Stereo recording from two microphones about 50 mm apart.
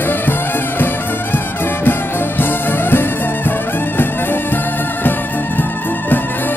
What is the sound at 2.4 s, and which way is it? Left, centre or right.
Music, left.